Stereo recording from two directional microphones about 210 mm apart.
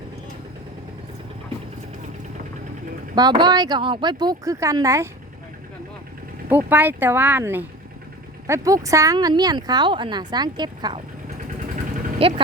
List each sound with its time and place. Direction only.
3.2 s speech: 20° right (ahead or behind)
6.5 s speech: 10° right (ahead or behind)
12.2 s speech: 25° right (ahead or behind)